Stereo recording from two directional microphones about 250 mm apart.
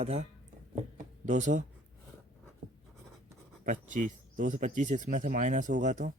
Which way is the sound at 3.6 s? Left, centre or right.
Right.